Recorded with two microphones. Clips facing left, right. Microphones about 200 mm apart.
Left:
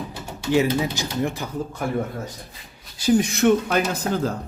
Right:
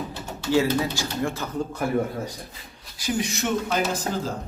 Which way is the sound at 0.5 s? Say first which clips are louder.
Left 1 dB; 20° left (ahead or behind).